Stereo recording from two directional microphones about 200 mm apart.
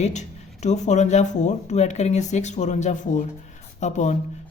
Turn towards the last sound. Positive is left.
turn(degrees=35)  # may be behind; listen again after turning